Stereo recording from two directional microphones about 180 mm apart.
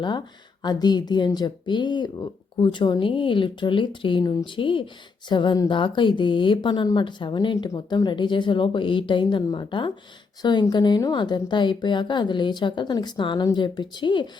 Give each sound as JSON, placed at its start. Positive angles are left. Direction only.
{"t": 0.6, "sound": "speech", "side_deg": 25}